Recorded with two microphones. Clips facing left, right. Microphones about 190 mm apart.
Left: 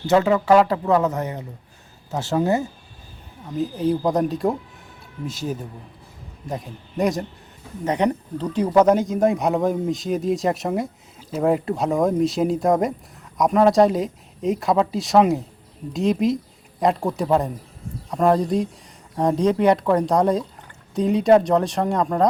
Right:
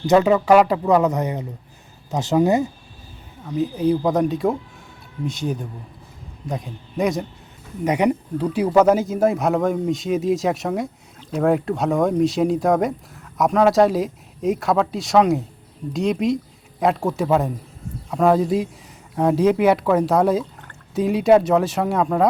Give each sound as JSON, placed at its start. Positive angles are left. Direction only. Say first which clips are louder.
{"t": 0.1, "sound": "speech", "louder": "right 2 dB", "side_deg": -15}
{"t": 3.5, "sound": "speech", "louder": "right 2 dB", "side_deg": 0}
{"t": 7.9, "sound": "speech", "louder": "right 2 dB", "side_deg": -10}